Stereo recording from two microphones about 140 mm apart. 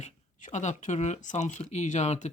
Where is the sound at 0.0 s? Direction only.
60° left (ahead or behind).